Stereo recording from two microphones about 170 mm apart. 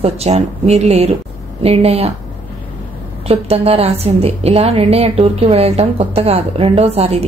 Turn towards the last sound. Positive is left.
turn(degrees=-35)  # may be behind; listen again after turning